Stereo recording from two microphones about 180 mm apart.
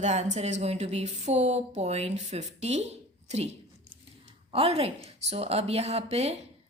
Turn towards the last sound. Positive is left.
turn(degrees=-35)  # may be behind; listen again after turning